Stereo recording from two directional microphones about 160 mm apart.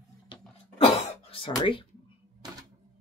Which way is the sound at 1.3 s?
35° left (ahead or behind).